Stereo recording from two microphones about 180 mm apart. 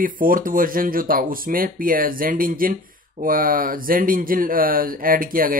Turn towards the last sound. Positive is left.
turn(degrees=-50)  # may be behind; listen again after turning